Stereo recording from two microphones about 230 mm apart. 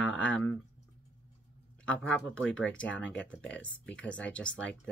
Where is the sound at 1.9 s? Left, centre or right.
Centre.